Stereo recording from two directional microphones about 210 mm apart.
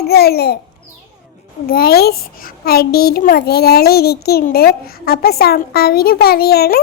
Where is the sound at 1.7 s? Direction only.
45° left (ahead or behind).